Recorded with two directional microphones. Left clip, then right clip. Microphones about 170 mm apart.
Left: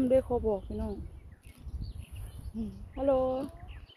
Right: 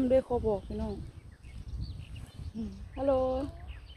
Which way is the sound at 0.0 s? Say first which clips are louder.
Even; 10° left (ahead or behind).